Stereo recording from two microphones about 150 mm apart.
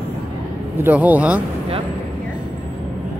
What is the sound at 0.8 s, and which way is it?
Speech, 10° right (ahead or behind).